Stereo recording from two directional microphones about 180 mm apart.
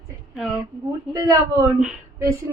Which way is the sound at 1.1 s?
20° right (ahead or behind).